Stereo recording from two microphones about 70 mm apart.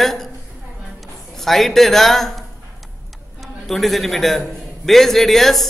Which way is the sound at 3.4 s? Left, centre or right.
Centre.